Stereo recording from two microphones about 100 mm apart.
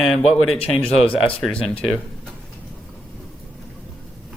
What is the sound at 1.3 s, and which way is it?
Speech, 5° left (ahead or behind).